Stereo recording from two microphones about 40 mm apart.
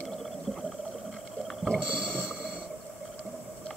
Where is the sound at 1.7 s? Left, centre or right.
Right.